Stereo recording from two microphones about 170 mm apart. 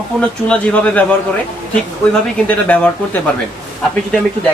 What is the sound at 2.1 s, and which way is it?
Speech, 10° left (ahead or behind).